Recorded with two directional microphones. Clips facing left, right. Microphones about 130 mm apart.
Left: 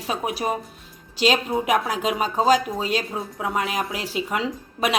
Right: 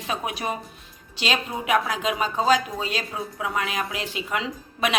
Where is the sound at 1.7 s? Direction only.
40° left (ahead or behind).